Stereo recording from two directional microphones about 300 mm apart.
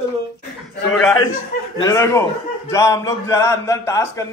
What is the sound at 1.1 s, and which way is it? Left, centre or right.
Speech, left.